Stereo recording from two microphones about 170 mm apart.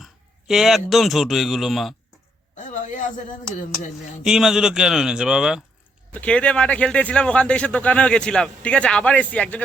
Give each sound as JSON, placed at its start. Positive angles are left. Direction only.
{"t": 0.0, "sound": "a man's voice", "side_deg": 0}
{"t": 2.6, "sound": "a sound", "side_deg": 45}
{"t": 4.2, "sound": "speech", "side_deg": 0}
{"t": 6.1, "sound": "speech", "side_deg": 5}